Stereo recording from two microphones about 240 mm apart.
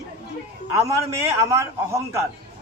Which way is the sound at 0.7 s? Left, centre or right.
Centre.